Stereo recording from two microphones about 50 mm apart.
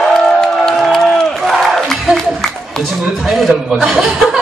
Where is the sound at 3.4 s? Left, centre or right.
Centre.